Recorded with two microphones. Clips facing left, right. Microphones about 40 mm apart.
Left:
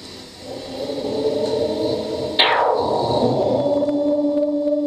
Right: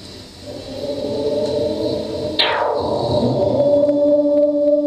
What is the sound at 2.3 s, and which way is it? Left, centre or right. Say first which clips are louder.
Synthesizer: left 2 dB; centre.